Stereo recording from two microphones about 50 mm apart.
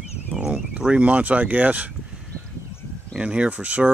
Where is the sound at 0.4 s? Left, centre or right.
Centre.